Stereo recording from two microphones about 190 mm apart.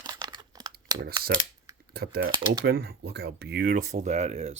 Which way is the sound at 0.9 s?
20° right (ahead or behind).